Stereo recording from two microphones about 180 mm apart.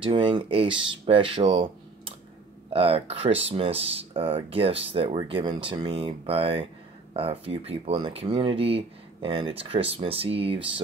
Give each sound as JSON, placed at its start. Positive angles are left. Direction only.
{"t": 0.0, "sound": "speech", "side_deg": -30}